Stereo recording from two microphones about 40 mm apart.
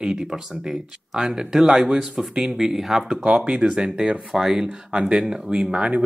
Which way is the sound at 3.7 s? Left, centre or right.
Right.